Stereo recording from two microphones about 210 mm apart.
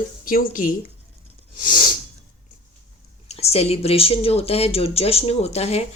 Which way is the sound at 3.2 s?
30° left (ahead or behind).